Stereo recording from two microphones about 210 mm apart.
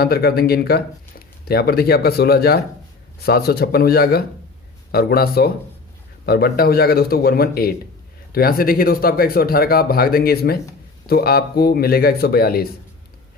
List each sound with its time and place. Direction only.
0.0 s speech: 50° left (ahead or behind)